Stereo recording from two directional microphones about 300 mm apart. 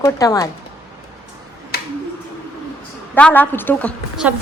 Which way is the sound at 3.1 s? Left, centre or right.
Centre.